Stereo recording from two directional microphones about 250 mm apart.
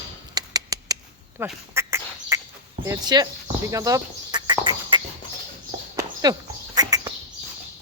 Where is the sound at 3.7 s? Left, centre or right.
Centre.